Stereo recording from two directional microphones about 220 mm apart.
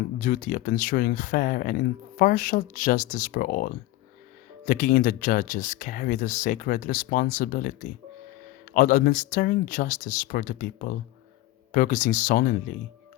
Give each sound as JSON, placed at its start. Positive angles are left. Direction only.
{"t": 0.2, "sound": "speech", "side_deg": 35}